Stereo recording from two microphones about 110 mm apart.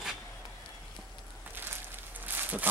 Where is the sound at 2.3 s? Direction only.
15° right (ahead or behind).